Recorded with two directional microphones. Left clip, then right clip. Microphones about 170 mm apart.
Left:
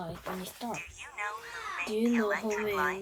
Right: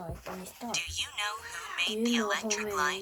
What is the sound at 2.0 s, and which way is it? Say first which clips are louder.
Speech: even; 30° right (ahead or behind).